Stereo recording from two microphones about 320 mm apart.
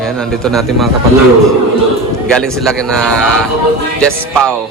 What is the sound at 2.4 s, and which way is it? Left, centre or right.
Speech, centre.